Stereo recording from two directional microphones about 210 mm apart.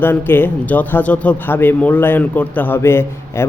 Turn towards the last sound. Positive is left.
turn(degrees=10)  # may be behind; listen again after turning